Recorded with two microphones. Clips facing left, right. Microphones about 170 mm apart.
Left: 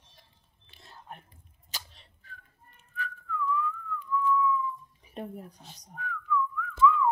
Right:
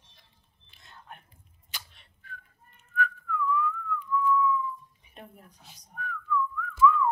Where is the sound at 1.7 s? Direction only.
35° left (ahead or behind).